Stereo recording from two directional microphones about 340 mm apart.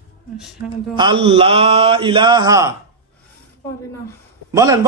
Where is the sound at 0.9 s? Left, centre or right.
Centre.